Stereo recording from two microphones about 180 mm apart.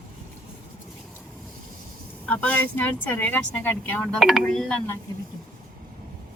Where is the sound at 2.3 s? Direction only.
10° left (ahead or behind).